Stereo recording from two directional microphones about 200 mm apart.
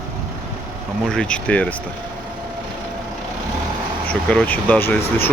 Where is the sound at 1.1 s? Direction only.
5° left (ahead or behind).